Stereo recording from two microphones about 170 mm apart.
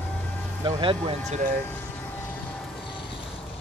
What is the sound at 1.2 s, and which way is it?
Speech, 45° right (ahead or behind).